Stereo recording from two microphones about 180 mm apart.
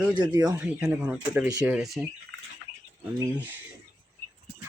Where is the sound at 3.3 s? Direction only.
10° right (ahead or behind).